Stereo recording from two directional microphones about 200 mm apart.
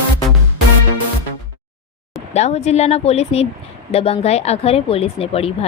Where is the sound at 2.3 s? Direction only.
35° left (ahead or behind).